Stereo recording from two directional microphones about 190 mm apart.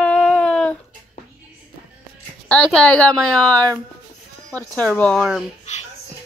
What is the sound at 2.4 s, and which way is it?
A woman's voice, 5° left (ahead or behind).